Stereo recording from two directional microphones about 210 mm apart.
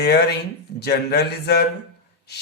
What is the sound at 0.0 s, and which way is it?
Speech, 50° left (ahead or behind).